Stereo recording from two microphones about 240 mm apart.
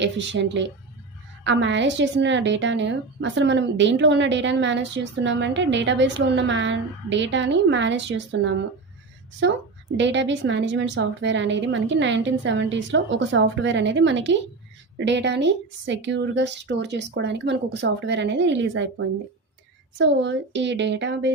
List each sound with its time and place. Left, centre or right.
0.0 s a woman's voice: right
10.0 s a woman's voice: right